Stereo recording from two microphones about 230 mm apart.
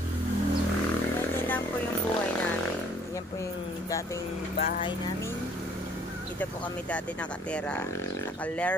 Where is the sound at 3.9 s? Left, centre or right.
Centre.